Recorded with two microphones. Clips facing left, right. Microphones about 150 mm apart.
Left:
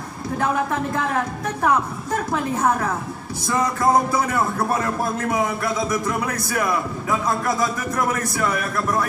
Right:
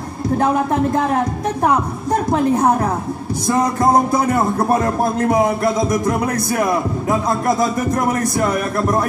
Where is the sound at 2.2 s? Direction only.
35° right (ahead or behind).